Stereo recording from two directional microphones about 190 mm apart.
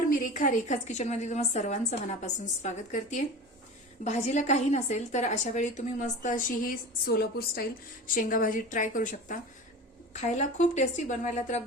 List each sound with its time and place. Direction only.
0.1 s a woman's voice: 45° left (ahead or behind)